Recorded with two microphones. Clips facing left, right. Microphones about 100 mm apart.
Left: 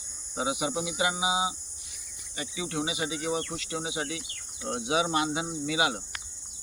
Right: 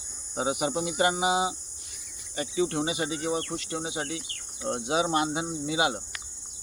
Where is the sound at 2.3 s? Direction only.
40° right (ahead or behind).